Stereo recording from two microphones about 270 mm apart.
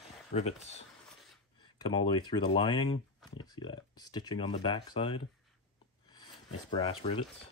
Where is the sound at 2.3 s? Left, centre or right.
Centre.